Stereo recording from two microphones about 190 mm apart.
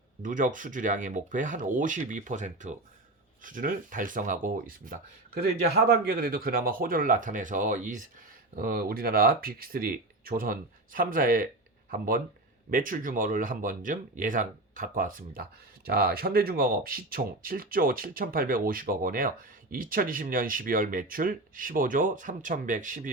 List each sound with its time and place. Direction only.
0.2 s speech: 45° right (ahead or behind)